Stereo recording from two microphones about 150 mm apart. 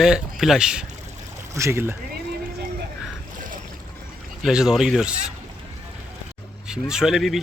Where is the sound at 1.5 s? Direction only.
20° right (ahead or behind).